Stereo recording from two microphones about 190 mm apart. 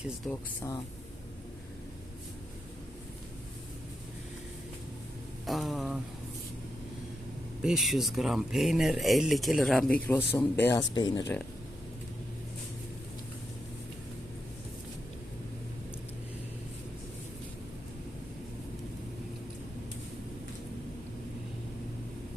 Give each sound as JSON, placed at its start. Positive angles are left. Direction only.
{"t": 0.3, "sound": "speech", "side_deg": 15}
{"t": 5.5, "sound": "a sound", "side_deg": 0}
{"t": 7.6, "sound": "speech", "side_deg": 0}